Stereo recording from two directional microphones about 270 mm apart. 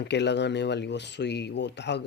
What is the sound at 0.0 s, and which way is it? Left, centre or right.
Speech, left.